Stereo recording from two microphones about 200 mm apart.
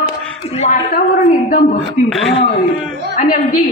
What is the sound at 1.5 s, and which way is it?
Speech, 35° left (ahead or behind).